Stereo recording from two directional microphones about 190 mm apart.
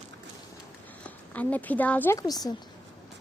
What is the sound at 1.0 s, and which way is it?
Speech, 10° left (ahead or behind).